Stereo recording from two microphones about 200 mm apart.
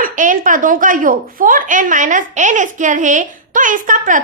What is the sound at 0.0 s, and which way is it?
A woman's voice, 40° right (ahead or behind).